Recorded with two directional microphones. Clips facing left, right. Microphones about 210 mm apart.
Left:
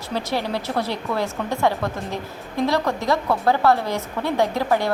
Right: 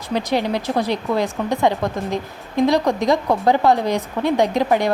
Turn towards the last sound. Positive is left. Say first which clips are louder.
# right 3 dB
turn(degrees=-15)  # may be behind; listen again after turning